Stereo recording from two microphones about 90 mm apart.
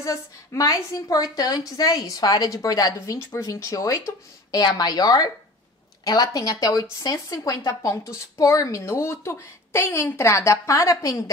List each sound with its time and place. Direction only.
0.0 s a woman's voice: 35° left (ahead or behind)
4.6 s a woman's voice: 50° left (ahead or behind)